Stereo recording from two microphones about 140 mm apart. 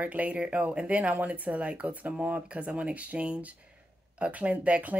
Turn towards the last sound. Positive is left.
turn(degrees=-10)  # may be behind; listen again after turning